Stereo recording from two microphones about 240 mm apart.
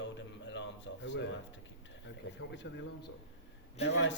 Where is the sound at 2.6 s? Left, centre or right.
Left.